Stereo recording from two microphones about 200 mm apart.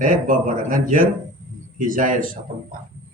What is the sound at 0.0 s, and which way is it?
A man's voice, 40° right (ahead or behind).